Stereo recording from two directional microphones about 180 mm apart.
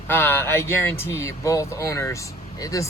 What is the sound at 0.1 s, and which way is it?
Speech, 10° left (ahead or behind).